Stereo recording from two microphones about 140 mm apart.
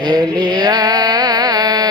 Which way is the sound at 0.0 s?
30° right (ahead or behind).